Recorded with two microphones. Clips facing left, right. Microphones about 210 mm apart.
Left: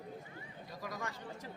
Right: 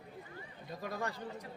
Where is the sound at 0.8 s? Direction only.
30° right (ahead or behind).